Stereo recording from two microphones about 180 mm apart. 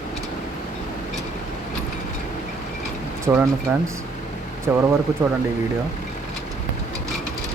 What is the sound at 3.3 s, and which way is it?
Speech, 15° right (ahead or behind).